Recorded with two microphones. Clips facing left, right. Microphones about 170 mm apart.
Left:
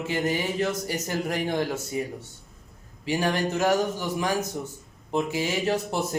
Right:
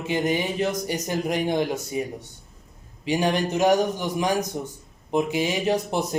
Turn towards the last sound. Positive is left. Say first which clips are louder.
# right 2 dB
turn(degrees=-20)  # may be behind; listen again after turning